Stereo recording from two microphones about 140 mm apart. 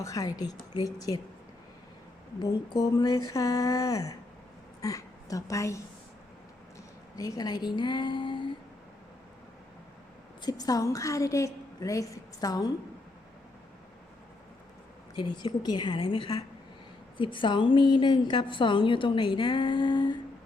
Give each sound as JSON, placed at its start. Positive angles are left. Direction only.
{"t": 0.0, "sound": "a woman's voice", "side_deg": 25}
{"t": 2.4, "sound": "a woman's voice", "side_deg": 25}
{"t": 7.2, "sound": "a woman's voice", "side_deg": 25}
{"t": 10.4, "sound": "a woman's voice", "side_deg": 25}
{"t": 15.1, "sound": "a woman's voice", "side_deg": 35}